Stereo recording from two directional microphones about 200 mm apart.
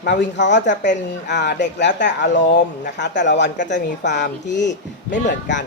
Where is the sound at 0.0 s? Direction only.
55° left (ahead or behind).